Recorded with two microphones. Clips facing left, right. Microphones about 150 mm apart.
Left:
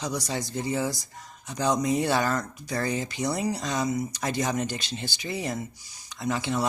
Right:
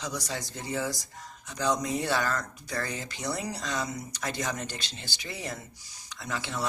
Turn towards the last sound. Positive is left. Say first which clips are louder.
# left 7 dB
turn(degrees=15)  # may be behind; listen again after turning